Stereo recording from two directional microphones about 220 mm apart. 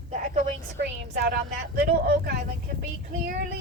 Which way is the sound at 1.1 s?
45° right (ahead or behind).